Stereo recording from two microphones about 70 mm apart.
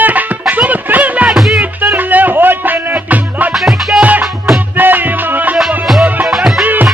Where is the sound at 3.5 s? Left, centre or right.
Centre.